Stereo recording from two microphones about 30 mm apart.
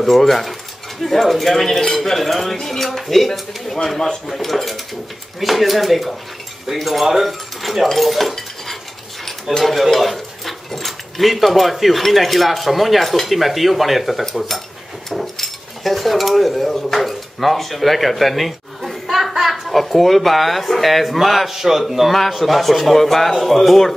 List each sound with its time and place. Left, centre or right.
0.0 s speech: centre
1.7 s speech: centre
2.0 s speech: centre
2.5 s speech: centre
2.8 s speech: centre
9.6 s speech: centre
15.3 s dishes: centre
19.7 s speech: centre